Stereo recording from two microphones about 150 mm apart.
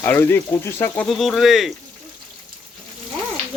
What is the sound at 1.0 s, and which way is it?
Speech, centre (ahead or behind).